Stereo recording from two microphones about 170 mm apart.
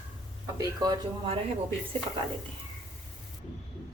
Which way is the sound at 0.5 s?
25° right (ahead or behind).